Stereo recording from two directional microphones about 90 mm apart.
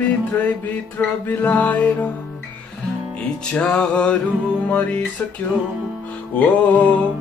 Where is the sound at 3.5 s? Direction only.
10° left (ahead or behind).